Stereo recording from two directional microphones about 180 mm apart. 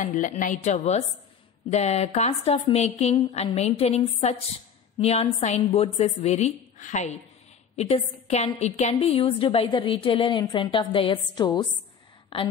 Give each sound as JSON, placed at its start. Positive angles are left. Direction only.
{"t": 0.0, "sound": "a woman's voice", "side_deg": 40}